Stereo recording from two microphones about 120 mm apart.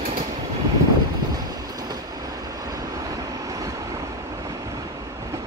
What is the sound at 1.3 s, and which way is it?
Vehicle, 30° right (ahead or behind).